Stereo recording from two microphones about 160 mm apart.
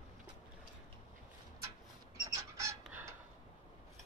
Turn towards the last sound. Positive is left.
turn(degrees=-15)  # may be behind; listen again after turning